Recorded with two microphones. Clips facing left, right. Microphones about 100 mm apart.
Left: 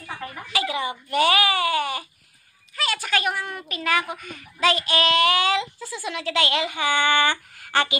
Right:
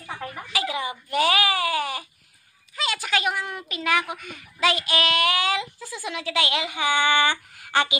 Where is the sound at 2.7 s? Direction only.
15° right (ahead or behind).